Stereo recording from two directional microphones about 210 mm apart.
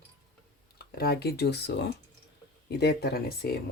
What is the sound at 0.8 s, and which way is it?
Speech, 50° left (ahead or behind).